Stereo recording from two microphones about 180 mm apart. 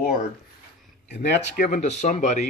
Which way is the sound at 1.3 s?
40° left (ahead or behind).